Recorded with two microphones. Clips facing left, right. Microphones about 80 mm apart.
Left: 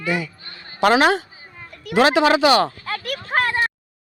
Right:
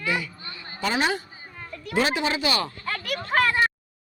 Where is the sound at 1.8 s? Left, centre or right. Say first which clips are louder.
Left 9 dB; left.